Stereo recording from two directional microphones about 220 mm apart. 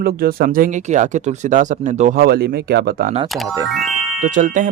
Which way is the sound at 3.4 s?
15° right (ahead or behind).